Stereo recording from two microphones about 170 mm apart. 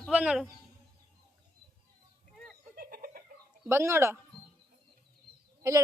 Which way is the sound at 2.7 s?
60° right (ahead or behind).